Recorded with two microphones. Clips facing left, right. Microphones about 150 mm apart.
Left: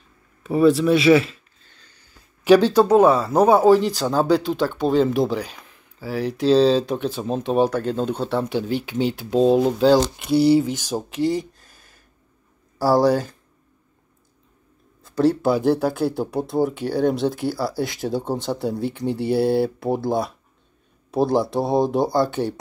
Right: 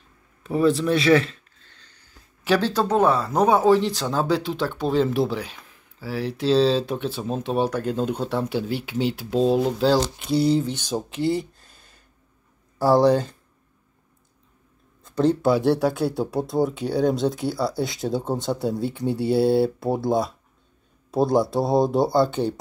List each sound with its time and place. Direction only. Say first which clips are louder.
0.5 s speech: left 4 dB; 10° left (ahead or behind)
2.4 s speech: left 7 dB; 15° left (ahead or behind)
12.7 s speech: even; 5° left (ahead or behind)
13.0 s speech: even; 20° right (ahead or behind)
15.0 s speech: left 1 dB; 5° left (ahead or behind)